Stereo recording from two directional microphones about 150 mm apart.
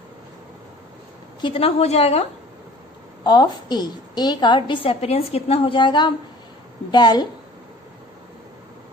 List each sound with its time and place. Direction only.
1.4 s a woman's voice: 40° left (ahead or behind)
3.3 s a woman's voice: 30° left (ahead or behind)